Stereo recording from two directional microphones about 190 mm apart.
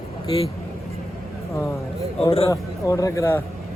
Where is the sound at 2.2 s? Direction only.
20° left (ahead or behind).